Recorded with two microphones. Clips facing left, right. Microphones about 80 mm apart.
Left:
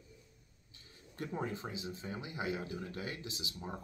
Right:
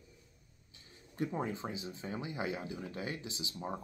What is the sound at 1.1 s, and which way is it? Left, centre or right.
Speech, right.